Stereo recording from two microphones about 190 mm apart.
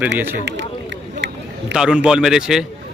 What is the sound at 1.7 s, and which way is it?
Speech, 5° right (ahead or behind).